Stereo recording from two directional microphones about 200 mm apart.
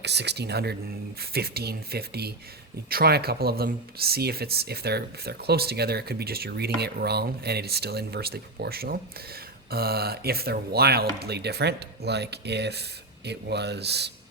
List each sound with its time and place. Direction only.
0.0 s speech: 55° right (ahead or behind)